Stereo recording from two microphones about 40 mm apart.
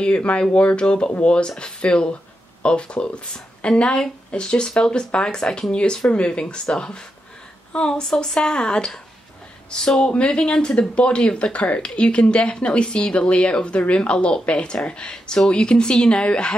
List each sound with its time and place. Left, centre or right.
0.0 s speech: left